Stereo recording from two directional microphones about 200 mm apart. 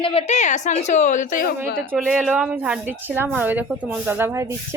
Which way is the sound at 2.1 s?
Centre (ahead or behind).